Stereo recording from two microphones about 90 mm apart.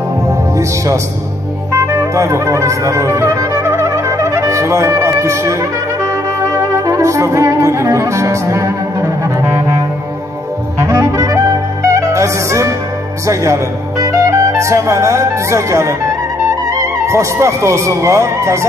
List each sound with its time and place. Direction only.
1.7 s music: 35° right (ahead or behind)
10.8 s music: 30° right (ahead or behind)
13.3 s speech: 35° right (ahead or behind)